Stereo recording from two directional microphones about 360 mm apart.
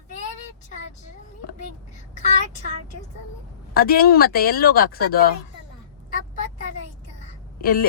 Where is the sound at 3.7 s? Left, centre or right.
Left.